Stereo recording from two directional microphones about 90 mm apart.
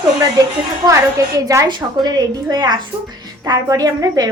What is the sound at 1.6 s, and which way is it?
A woman's voice, 55° right (ahead or behind).